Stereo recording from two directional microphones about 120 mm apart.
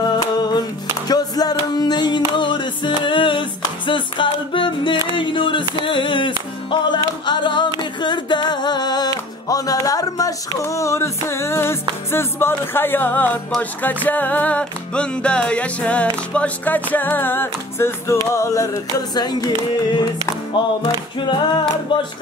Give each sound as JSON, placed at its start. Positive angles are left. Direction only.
{"t": 0.0, "sound": "music", "side_deg": 35}
{"t": 1.0, "sound": "singing", "side_deg": 35}
{"t": 5.1, "sound": "speech", "side_deg": 45}
{"t": 5.9, "sound": "music", "side_deg": 45}
{"t": 21.9, "sound": "speech", "side_deg": 40}